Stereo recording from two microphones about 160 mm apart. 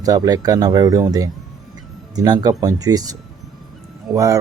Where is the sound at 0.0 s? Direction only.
25° right (ahead or behind).